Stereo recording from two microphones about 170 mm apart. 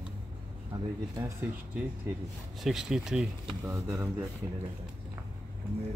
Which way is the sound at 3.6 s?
15° right (ahead or behind).